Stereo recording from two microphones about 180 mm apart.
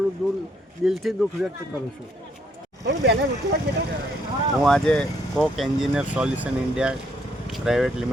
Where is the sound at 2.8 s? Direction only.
80° right.